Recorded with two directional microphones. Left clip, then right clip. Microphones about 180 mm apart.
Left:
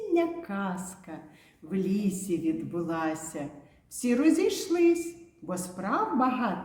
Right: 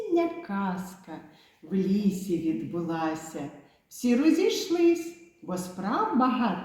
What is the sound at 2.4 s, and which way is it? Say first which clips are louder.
A woman's voice: even; 15° left (ahead or behind).